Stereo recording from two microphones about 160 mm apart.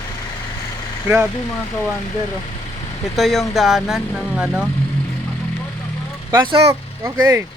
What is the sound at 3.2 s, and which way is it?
Speech, centre (ahead or behind).